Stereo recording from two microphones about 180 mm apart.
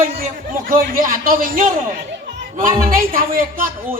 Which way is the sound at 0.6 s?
50° right (ahead or behind).